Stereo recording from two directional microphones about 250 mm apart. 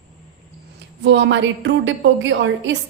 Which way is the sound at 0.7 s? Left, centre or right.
Right.